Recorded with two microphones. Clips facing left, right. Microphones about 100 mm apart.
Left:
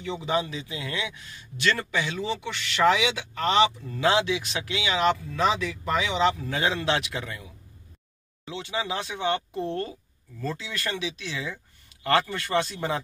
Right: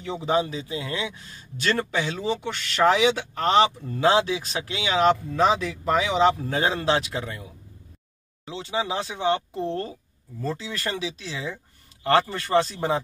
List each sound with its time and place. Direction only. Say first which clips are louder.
0.0 s speech: right 3 dB; 35° right (ahead or behind)
8.5 s speech: right 3 dB; 30° right (ahead or behind)